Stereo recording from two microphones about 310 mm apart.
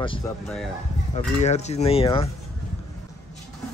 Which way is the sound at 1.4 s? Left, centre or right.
Left.